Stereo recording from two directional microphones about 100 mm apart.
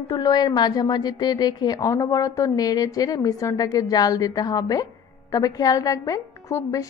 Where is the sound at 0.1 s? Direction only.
45° left (ahead or behind).